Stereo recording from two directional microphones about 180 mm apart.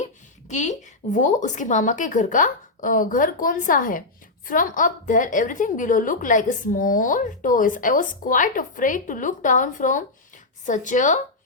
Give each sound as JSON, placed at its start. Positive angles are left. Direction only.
{"t": 0.0, "sound": "a woman's voice", "side_deg": 40}